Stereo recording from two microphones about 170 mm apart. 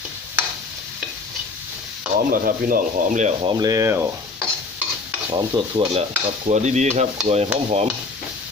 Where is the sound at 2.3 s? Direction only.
55° right (ahead or behind).